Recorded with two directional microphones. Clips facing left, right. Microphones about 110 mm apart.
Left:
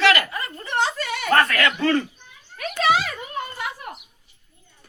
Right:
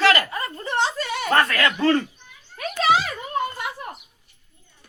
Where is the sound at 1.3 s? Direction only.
20° right (ahead or behind).